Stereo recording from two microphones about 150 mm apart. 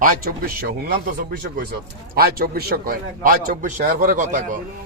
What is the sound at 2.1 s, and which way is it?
A man's voice, 90° right.